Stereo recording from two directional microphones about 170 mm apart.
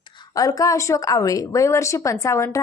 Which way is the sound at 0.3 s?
20° left (ahead or behind).